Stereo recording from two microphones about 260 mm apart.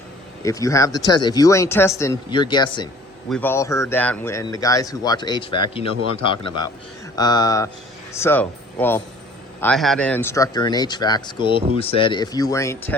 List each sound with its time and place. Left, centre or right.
0.4 s speech: centre
3.2 s a man's voice: centre